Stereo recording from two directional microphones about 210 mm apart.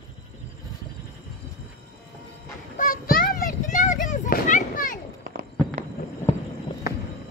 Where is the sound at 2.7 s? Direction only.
40° left (ahead or behind).